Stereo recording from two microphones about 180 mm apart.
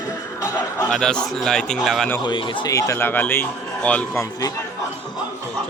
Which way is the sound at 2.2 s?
20° left (ahead or behind).